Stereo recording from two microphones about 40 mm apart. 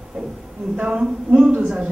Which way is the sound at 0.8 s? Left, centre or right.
Right.